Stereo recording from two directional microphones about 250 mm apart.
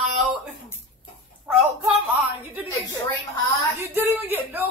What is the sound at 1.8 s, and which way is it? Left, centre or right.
Speech, centre.